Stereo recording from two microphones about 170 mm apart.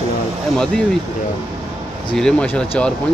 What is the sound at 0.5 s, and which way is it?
Speech, 5° left (ahead or behind).